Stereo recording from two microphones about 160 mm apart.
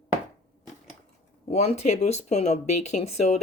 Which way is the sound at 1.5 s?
40° left (ahead or behind).